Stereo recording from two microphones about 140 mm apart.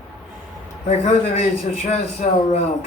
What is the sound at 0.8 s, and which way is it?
Speech, 50° left (ahead or behind).